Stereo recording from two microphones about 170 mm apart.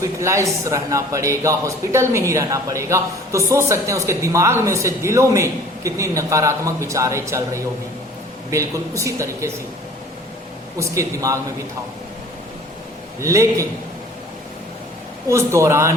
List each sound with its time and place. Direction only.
0.0 s a man's voice: 15° right (ahead or behind)
10.8 s speech: 20° right (ahead or behind)
13.2 s a man's voice: 20° right (ahead or behind)
15.3 s a man's voice: 15° right (ahead or behind)